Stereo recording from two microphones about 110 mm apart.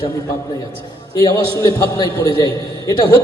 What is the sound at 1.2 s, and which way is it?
A man's voice, 35° left (ahead or behind).